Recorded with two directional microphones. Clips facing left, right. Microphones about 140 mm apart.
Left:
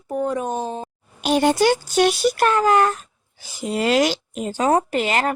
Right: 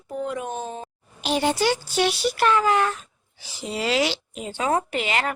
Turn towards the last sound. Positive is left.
turn(degrees=40)  # may be behind; listen again after turning